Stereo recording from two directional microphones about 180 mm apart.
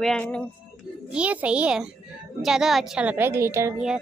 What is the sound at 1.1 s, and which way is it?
A woman's voice, 5° right (ahead or behind).